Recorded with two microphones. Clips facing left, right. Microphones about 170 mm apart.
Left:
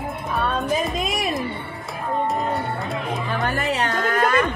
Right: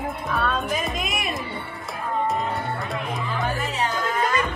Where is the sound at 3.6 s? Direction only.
65° left (ahead or behind).